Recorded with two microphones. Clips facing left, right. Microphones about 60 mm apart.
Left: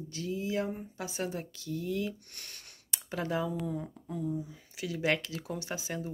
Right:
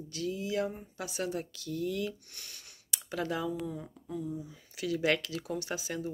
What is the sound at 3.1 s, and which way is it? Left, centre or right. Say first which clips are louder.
Speech: left 1 dB; left.